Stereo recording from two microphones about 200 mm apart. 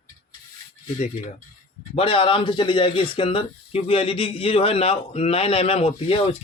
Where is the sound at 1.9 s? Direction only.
25° left (ahead or behind).